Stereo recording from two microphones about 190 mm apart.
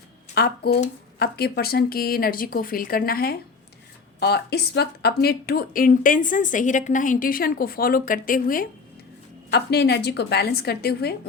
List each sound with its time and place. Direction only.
0.3 s a woman's voice: 55° left (ahead or behind)
9.5 s a woman's voice: 60° left (ahead or behind)